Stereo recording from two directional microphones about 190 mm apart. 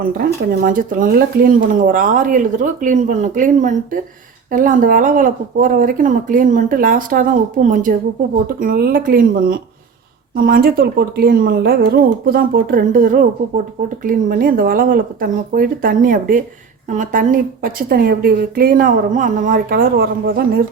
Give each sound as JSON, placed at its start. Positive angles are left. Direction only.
{"t": 0.0, "sound": "speech", "side_deg": -45}